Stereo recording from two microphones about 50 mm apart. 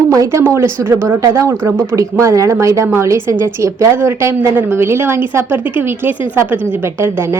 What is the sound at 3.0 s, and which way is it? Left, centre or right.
Speech, right.